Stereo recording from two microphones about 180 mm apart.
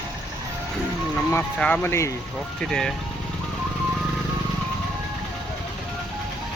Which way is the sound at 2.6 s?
5° left (ahead or behind).